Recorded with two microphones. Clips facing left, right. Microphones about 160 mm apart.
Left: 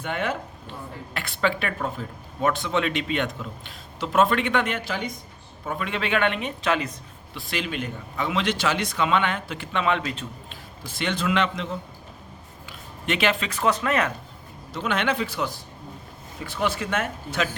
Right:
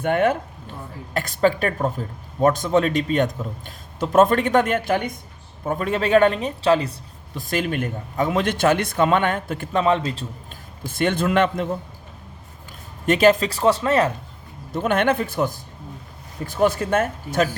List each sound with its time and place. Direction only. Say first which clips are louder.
0.0 s speech: right 8 dB; 50° right (ahead or behind)
5.6 s a man's voice: right 6 dB; 40° right (ahead or behind)
7.3 s speech: right 6 dB; 45° right (ahead or behind)
10.5 s a man's voice: right 4 dB; 50° right (ahead or behind)
13.1 s a man's voice: right 9 dB; 40° right (ahead or behind)
14.7 s speech: right 6 dB; 50° right (ahead or behind)